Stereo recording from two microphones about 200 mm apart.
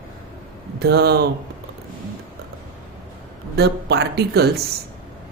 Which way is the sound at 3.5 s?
55° right (ahead or behind).